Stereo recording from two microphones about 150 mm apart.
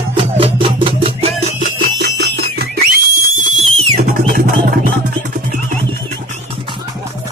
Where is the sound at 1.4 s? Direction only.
65° right (ahead or behind).